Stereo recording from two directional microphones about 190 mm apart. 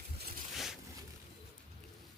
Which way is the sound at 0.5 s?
Centre (ahead or behind).